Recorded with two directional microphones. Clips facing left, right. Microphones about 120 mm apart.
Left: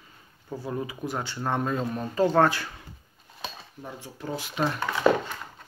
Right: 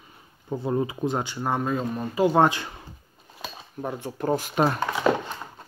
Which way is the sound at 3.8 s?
60° right (ahead or behind).